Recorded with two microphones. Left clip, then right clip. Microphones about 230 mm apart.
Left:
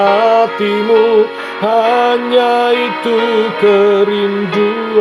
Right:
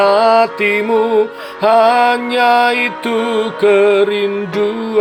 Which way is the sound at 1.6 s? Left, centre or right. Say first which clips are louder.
Right 1 dB; right.